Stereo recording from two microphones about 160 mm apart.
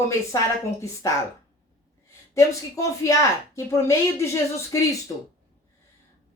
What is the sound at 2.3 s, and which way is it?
Speech, 20° left (ahead or behind).